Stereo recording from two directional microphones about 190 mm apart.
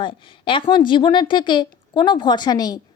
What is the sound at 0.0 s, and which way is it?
A woman's voice, 25° left (ahead or behind).